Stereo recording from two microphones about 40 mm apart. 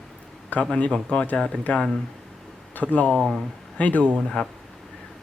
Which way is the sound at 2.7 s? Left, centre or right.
Left.